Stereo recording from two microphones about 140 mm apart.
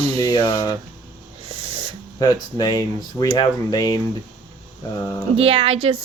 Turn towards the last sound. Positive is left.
turn(degrees=-45)  # may be behind; listen again after turning